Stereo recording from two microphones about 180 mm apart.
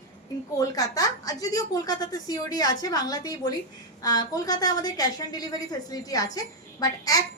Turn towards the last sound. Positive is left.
turn(degrees=20)  # may be behind; listen again after turning